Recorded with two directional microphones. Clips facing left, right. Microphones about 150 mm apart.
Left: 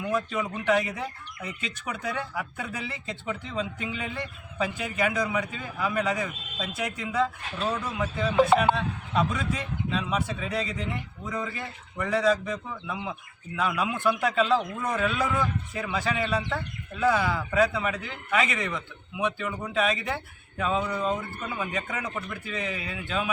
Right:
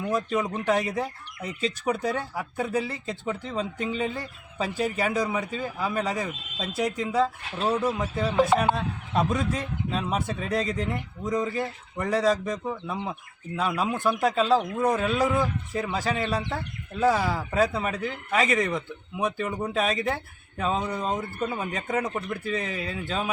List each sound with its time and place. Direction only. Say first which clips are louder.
0.1 s a man's voice: right 3 dB; 35° right (ahead or behind)